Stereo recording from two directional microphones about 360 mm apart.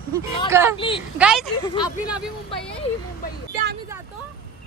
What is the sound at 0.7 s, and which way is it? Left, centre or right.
Speech, centre.